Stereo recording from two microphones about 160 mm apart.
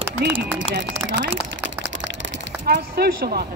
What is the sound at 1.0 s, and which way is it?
Speech, 90° right.